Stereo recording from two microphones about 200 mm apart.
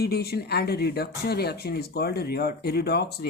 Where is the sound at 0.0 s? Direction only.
50° left (ahead or behind).